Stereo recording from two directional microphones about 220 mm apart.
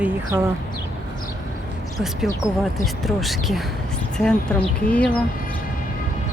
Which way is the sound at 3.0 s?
Centre (ahead or behind).